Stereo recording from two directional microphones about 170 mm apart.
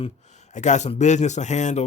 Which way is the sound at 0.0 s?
45° left (ahead or behind).